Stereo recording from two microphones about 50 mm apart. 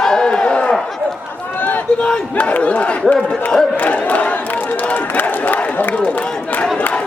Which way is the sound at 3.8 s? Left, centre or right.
Left.